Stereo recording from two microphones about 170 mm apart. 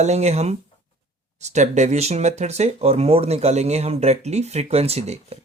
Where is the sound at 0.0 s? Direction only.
40° right (ahead or behind).